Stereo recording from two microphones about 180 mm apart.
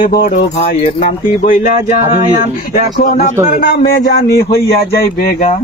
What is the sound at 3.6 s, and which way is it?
Speech, 65° left (ahead or behind).